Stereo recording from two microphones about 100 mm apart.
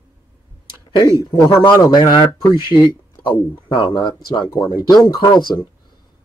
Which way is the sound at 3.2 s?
55° left (ahead or behind).